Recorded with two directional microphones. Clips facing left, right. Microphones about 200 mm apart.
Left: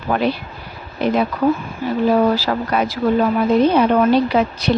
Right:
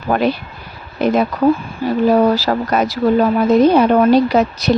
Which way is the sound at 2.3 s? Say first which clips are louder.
Right 3 dB; 40° right (ahead or behind).